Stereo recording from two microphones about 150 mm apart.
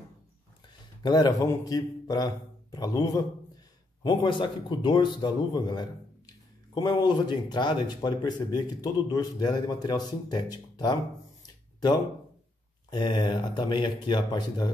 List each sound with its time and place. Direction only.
1.0 s a man's voice: 30° left (ahead or behind)
11.4 s a sound: 25° left (ahead or behind)
12.9 s a man's voice: 30° left (ahead or behind)